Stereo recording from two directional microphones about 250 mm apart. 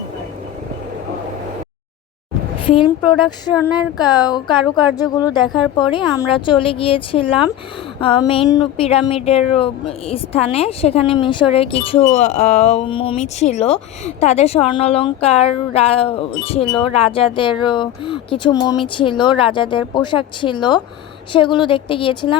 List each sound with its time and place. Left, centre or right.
2.6 s speech: centre